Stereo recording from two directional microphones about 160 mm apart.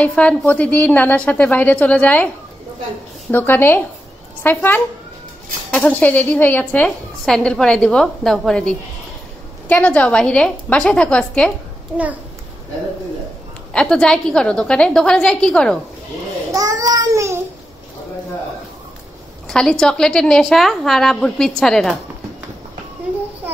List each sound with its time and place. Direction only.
0.0 s a woman's voice: 10° left (ahead or behind)
3.3 s a woman's voice: 10° left (ahead or behind)
13.7 s a woman's voice: 5° left (ahead or behind)
16.5 s child singing: 20° right (ahead or behind)
19.4 s a woman's voice: 5° left (ahead or behind)